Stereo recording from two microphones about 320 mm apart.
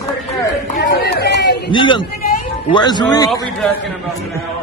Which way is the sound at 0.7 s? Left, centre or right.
Left.